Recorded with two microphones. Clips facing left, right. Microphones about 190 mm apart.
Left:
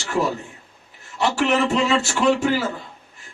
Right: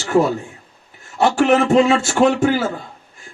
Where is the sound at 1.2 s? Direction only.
45° right (ahead or behind).